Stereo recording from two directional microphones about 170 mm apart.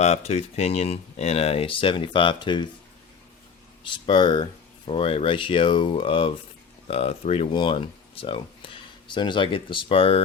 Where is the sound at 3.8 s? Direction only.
30° left (ahead or behind).